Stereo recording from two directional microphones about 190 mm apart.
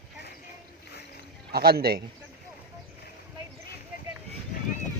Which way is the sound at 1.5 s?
55° right (ahead or behind).